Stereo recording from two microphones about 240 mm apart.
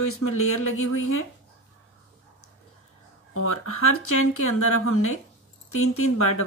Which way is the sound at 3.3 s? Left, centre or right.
Left.